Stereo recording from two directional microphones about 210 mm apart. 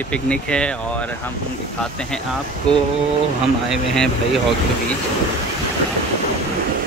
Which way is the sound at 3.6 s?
Centre (ahead or behind).